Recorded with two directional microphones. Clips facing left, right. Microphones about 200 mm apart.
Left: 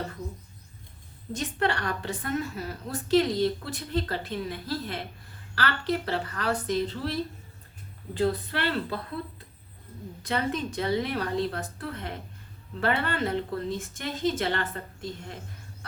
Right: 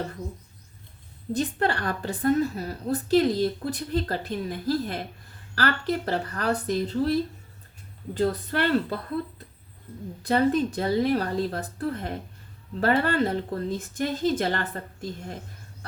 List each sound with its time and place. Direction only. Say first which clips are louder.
1.3 s a woman's voice: right 3 dB; 40° right (ahead or behind)
8.1 s a woman's voice: right 2 dB; 45° right (ahead or behind)
10.2 s a woman's voice: right 7 dB; 40° right (ahead or behind)